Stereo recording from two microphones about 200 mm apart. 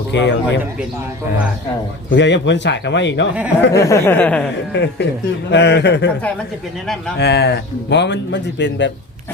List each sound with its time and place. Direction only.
0.1 s speech: 65° left (ahead or behind)
2.0 s speech: 65° left (ahead or behind)
3.7 s speech: 15° left (ahead or behind)
4.7 s speech: 60° left (ahead or behind)
7.2 s speech: 55° left (ahead or behind)